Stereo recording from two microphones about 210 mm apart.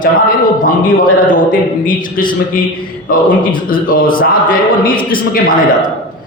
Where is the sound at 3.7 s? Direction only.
45° left (ahead or behind).